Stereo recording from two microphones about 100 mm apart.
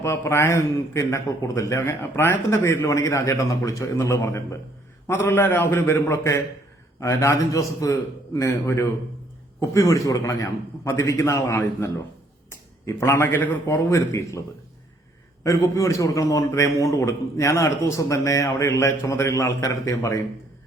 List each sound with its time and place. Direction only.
0.0 s a man's voice: 25° left (ahead or behind)
13.7 s a man's voice: 35° left (ahead or behind)
15.6 s a man's voice: 30° left (ahead or behind)